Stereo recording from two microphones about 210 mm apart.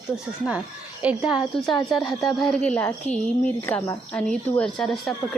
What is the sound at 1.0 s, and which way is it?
A woman's voice, centre (ahead or behind).